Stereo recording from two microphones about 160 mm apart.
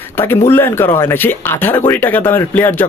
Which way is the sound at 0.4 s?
15° left (ahead or behind).